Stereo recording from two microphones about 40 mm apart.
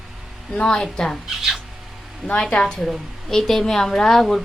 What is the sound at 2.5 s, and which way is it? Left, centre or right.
Speech, centre.